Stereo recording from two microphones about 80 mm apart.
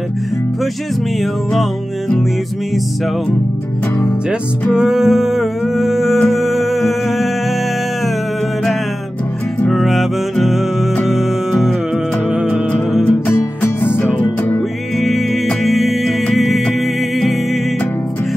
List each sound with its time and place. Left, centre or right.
1.5 s music: centre
4.7 s music: centre
9.7 s music: centre
13.6 s music: left
15.0 s music: centre